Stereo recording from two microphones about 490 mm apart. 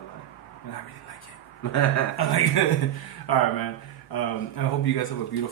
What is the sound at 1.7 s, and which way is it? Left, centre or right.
Speech, left.